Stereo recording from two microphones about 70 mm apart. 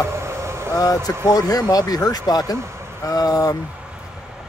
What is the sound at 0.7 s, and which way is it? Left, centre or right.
Speech, left.